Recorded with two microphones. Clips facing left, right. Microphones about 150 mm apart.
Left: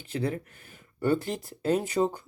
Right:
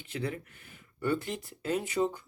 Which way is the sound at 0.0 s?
35° left (ahead or behind).